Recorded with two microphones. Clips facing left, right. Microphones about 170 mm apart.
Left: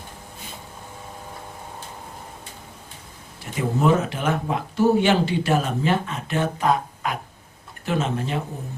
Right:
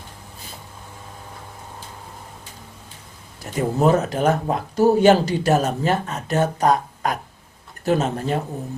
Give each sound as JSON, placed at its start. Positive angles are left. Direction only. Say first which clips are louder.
{"t": 3.8, "sound": "speech", "louder": "right 2 dB", "side_deg": -40}